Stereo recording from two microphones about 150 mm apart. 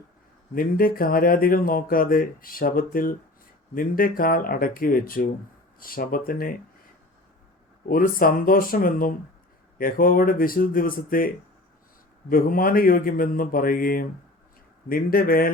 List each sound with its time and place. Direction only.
0.5 s speech: 70° left (ahead or behind)
7.9 s speech: 70° left (ahead or behind)
12.3 s speech: 70° left (ahead or behind)